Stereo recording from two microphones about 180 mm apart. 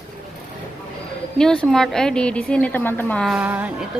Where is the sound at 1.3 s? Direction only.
5° left (ahead or behind).